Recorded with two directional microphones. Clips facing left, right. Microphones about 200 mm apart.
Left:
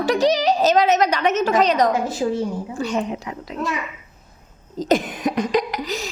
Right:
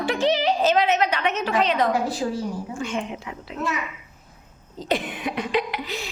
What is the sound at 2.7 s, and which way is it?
Speech, 40° left (ahead or behind).